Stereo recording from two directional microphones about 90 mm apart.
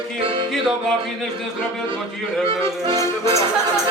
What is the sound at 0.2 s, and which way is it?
Music, 80° right.